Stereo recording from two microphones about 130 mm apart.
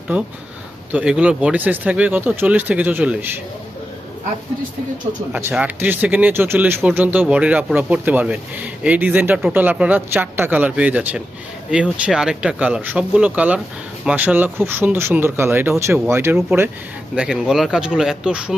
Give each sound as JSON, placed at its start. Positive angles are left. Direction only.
{"t": 0.9, "sound": "speech", "side_deg": -10}
{"t": 5.3, "sound": "speech", "side_deg": -20}
{"t": 17.2, "sound": "speech", "side_deg": -5}